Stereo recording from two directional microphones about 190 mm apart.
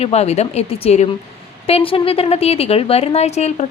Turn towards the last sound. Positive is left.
turn(degrees=35)  # may be behind; listen again after turning